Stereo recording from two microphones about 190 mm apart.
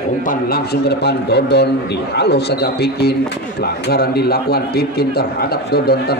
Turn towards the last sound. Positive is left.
turn(degrees=55)  # may be behind; listen again after turning